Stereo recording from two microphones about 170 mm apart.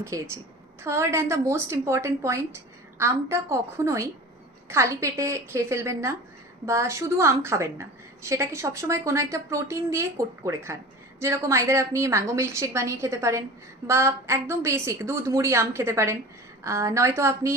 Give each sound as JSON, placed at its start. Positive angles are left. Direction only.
{"t": 0.0, "sound": "a woman's voice", "side_deg": -15}